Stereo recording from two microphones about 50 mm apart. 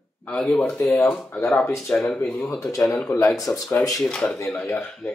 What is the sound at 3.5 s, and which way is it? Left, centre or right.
Speech, left.